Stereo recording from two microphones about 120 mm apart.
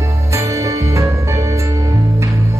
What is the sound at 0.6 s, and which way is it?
Music, 25° right (ahead or behind).